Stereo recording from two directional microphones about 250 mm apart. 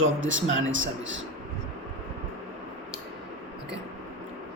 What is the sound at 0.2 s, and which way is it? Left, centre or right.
Speech, right.